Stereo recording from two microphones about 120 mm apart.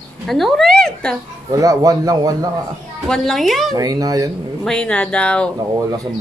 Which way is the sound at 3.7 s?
30° right (ahead or behind).